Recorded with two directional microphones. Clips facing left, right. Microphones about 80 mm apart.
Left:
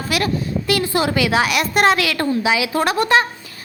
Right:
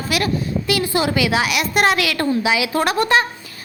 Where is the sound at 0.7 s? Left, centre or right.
Centre.